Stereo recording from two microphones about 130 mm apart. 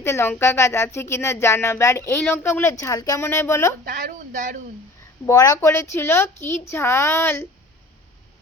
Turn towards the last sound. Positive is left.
turn(degrees=20)  # may be behind; listen again after turning